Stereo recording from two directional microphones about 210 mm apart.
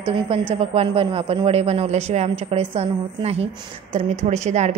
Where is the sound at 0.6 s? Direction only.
25° right (ahead or behind).